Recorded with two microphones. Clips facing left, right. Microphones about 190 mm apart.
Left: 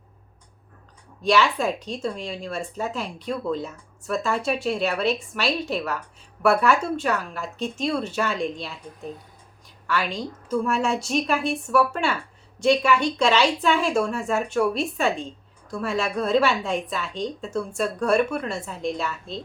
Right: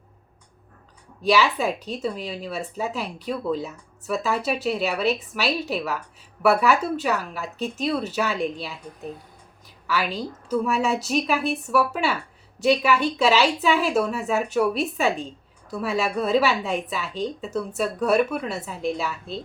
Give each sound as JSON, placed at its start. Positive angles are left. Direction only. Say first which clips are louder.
{"t": 1.2, "sound": "a woman's voice", "louder": "even", "side_deg": -5}
{"t": 9.8, "sound": "a woman's voice", "louder": "even", "side_deg": -5}